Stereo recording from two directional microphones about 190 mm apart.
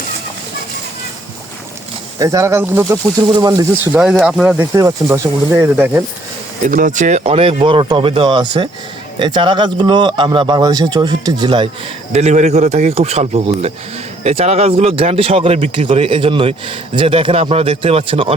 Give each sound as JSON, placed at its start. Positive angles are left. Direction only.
{"t": 2.1, "sound": "speech", "side_deg": -15}
{"t": 3.9, "sound": "speech", "side_deg": -5}
{"t": 6.7, "sound": "speech", "side_deg": -45}
{"t": 12.1, "sound": "speech", "side_deg": -35}